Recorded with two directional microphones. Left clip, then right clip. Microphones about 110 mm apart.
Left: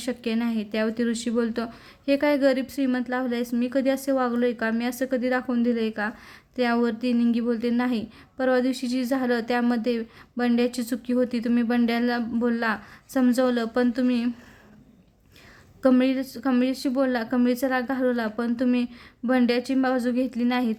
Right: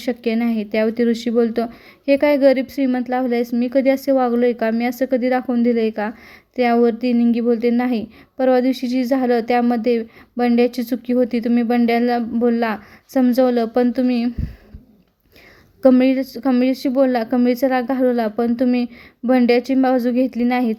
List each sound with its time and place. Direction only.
0.0 s speech: 35° right (ahead or behind)
15.8 s speech: 35° right (ahead or behind)